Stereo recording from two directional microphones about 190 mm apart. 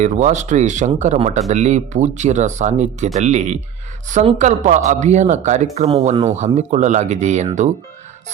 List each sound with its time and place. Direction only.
0.0 s speech: 40° right (ahead or behind)